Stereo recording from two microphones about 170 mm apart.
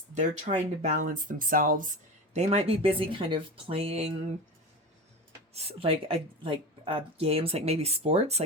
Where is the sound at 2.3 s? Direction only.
35° right (ahead or behind).